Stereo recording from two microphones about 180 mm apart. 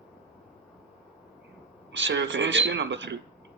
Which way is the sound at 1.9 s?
90° right.